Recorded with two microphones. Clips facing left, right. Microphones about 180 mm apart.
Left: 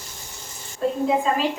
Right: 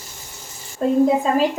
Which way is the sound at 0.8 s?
40° right (ahead or behind).